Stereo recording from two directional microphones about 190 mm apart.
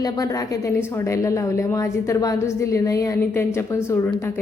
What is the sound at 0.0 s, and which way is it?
A woman's voice, 20° left (ahead or behind).